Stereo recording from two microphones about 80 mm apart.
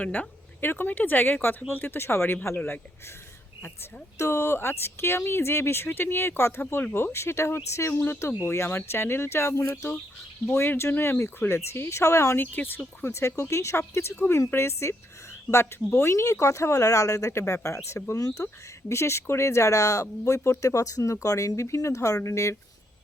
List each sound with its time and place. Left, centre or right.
0.0 s speech: centre
4.2 s speech: left
12.5 s speech: left